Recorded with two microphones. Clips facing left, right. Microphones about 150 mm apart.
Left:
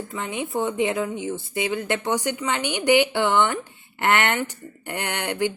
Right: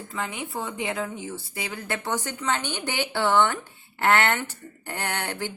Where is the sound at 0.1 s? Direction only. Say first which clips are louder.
Left 2 dB; 20° left (ahead or behind).